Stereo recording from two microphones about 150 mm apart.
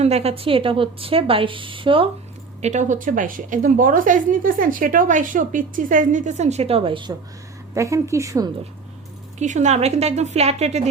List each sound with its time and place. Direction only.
0.0 s a woman's voice: 45° right (ahead or behind)
2.6 s a woman's voice: 50° right (ahead or behind); by 7.1 s 35° right (ahead or behind)
7.7 s a woman's voice: 20° right (ahead or behind)
9.4 s a woman's voice: 50° right (ahead or behind)